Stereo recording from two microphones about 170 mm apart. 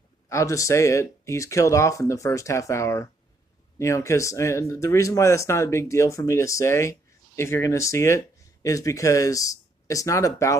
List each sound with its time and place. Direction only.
0.3 s speech: 20° left (ahead or behind)